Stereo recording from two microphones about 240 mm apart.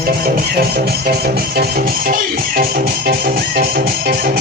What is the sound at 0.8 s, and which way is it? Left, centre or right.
Music, right.